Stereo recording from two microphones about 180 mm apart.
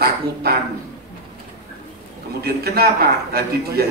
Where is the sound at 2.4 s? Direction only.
60° right (ahead or behind).